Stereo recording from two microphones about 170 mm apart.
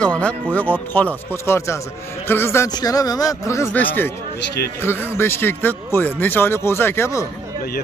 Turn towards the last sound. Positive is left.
turn(degrees=15)  # may be behind; listen again after turning